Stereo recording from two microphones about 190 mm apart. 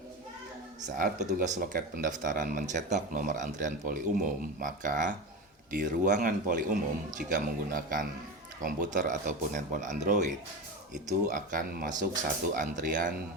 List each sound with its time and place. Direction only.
0.9 s speech: 45° right (ahead or behind)